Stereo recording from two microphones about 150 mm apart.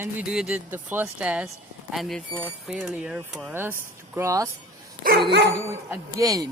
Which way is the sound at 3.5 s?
15° right (ahead or behind).